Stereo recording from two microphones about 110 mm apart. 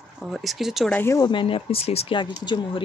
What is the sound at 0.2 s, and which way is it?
Speech, centre (ahead or behind).